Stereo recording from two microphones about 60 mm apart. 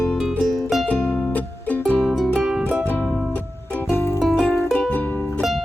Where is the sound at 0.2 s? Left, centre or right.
Centre.